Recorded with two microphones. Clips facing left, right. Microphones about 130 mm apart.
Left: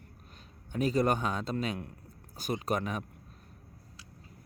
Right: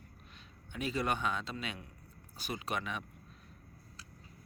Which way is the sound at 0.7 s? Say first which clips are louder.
Left 7 dB; 40° left (ahead or behind).